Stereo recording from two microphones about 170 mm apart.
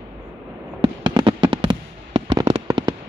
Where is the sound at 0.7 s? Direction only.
30° right (ahead or behind).